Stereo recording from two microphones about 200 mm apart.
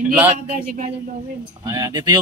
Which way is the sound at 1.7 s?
20° right (ahead or behind).